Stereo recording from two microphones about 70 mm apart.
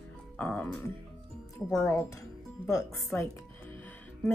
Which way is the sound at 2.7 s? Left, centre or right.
Left.